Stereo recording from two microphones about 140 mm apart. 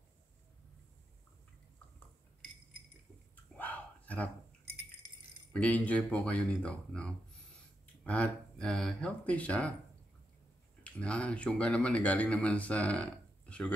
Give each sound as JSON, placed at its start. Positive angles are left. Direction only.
{"t": 3.5, "sound": "a sound", "side_deg": 10}
{"t": 5.5, "sound": "speech", "side_deg": 10}
{"t": 10.8, "sound": "speech", "side_deg": 10}